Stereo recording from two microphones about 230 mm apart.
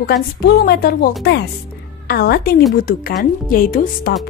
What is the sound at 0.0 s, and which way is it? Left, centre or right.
A woman's voice, left.